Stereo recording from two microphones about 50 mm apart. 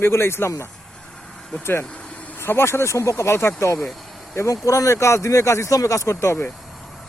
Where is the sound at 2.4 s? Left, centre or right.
Left.